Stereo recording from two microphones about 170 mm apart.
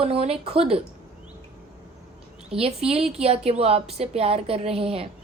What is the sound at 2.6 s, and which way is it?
A woman's voice, 35° right (ahead or behind).